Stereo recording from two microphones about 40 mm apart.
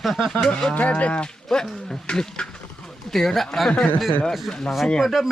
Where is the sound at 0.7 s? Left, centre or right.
Left.